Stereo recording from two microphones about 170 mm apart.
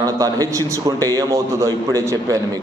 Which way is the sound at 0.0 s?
20° right (ahead or behind).